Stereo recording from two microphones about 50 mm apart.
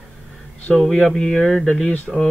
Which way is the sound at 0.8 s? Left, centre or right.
Centre.